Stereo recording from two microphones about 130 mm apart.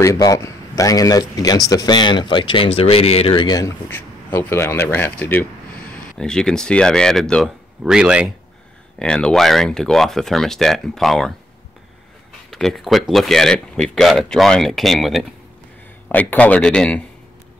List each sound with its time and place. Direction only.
0.0 s speech: 25° left (ahead or behind)
3.9 s speech: 15° left (ahead or behind)
7.8 s speech: 5° right (ahead or behind)
9.0 s speech: 5° left (ahead or behind)
12.4 s speech: centre (ahead or behind)
16.1 s speech: 15° left (ahead or behind)